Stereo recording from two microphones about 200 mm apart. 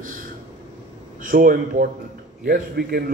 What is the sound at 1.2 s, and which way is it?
A man's voice, 45° right (ahead or behind).